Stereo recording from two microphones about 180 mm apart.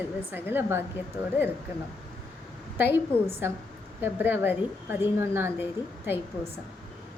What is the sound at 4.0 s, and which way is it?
A woman's voice, 10° right (ahead or behind).